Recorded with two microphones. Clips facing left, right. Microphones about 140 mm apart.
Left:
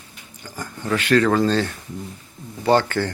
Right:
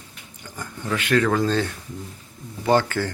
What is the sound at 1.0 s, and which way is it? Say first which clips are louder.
Speech: left 3 dB; 10° right (ahead or behind).